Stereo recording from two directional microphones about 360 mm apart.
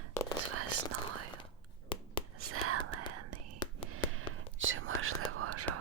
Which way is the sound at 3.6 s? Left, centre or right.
Centre.